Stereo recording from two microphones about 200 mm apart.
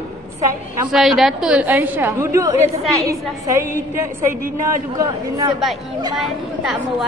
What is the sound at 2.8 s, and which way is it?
Speech, centre (ahead or behind).